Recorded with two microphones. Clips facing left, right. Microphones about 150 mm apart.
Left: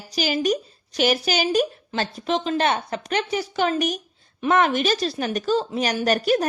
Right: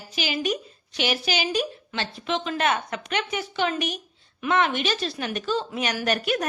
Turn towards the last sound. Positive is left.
turn(degrees=35)  # may be behind; listen again after turning